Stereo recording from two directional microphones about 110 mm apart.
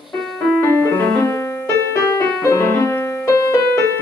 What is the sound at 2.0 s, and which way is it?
Music, 30° left (ahead or behind).